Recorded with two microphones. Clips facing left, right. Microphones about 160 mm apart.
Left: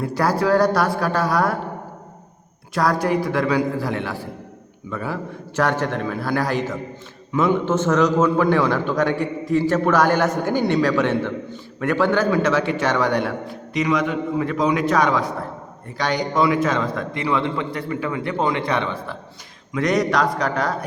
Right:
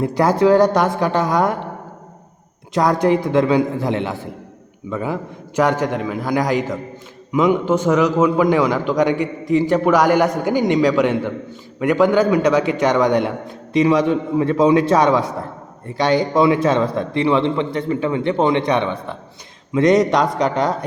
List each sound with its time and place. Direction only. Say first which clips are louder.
0.0 s a man's voice: right 5 dB; 20° right (ahead or behind)
2.7 s a man's voice: right 4 dB; 20° right (ahead or behind)